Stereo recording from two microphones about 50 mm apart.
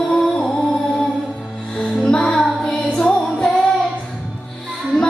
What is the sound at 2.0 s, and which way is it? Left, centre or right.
Music, centre.